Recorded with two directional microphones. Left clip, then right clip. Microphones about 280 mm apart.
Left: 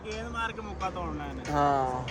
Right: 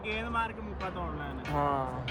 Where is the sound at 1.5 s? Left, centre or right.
Left.